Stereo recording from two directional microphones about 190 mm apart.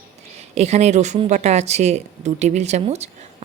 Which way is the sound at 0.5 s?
35° right (ahead or behind).